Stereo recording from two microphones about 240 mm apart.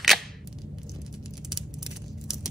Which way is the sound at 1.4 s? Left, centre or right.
Centre.